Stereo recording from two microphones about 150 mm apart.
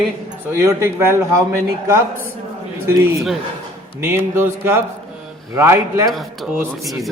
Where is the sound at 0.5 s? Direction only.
20° right (ahead or behind).